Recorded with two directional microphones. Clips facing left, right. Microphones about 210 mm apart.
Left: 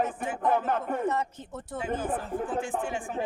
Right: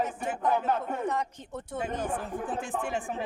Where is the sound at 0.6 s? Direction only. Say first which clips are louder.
Left 1 dB; 55° left (ahead or behind).